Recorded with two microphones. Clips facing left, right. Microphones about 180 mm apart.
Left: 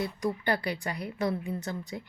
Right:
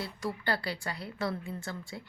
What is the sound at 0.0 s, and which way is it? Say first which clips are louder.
A woman's voice: left 5 dB; 20° left (ahead or behind).